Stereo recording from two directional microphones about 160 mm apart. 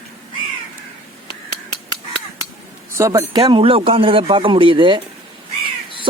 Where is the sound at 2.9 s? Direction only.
20° right (ahead or behind).